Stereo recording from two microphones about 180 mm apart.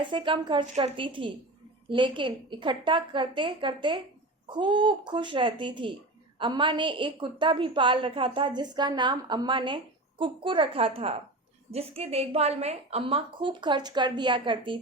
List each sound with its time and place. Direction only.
0.0 s a woman's voice: 25° right (ahead or behind)